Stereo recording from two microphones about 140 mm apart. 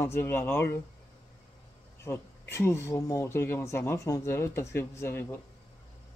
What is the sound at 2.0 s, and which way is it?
Speech, 20° left (ahead or behind).